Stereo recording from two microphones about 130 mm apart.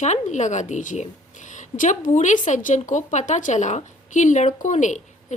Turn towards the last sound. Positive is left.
turn(degrees=70)  # may be behind; listen again after turning